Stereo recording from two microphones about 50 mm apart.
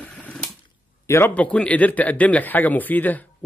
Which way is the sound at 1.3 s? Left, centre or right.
Left.